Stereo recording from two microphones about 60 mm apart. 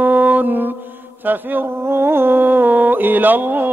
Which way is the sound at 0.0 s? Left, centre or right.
Right.